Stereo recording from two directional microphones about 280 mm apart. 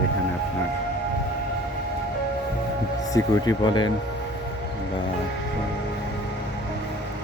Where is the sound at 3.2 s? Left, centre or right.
Centre.